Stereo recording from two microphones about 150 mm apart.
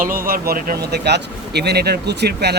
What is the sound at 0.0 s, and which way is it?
Speech, 75° right (ahead or behind).